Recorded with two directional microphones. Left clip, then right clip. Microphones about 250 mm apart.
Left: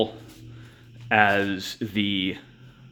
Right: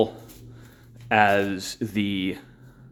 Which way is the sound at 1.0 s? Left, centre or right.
Centre.